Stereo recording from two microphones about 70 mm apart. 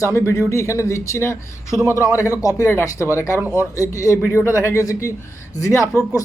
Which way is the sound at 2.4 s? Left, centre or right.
Left.